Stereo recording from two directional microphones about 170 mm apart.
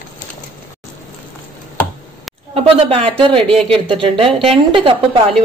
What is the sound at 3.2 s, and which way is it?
A woman's voice, 30° right (ahead or behind).